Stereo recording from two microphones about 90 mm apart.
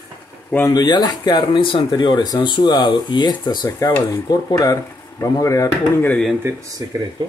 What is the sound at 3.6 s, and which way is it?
Speech, 40° left (ahead or behind).